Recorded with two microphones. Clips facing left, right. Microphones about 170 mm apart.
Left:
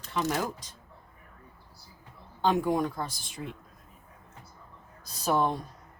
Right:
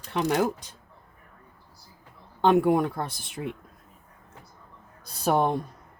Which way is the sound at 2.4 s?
60° right (ahead or behind).